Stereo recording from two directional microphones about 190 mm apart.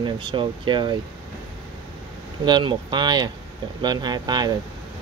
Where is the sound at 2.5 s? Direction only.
25° right (ahead or behind).